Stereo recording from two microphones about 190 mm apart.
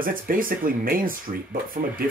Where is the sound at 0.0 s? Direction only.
45° right (ahead or behind).